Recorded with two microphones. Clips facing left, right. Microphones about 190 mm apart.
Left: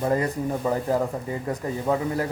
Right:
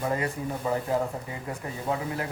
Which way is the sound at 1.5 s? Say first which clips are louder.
Left 6 dB; 40° left (ahead or behind).